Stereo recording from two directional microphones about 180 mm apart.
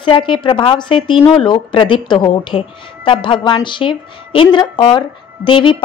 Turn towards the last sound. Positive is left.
turn(degrees=30)  # may be behind; listen again after turning